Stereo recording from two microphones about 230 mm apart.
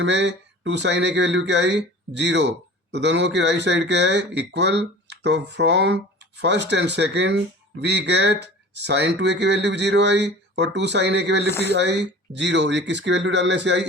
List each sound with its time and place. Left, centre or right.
0.0 s speech: right